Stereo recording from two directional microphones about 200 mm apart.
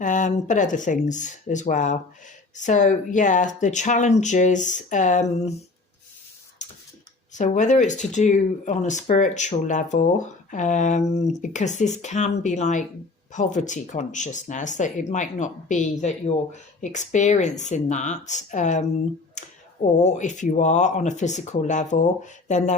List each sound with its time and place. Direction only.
0.0 s speech: 40° left (ahead or behind)
7.3 s speech: 35° left (ahead or behind)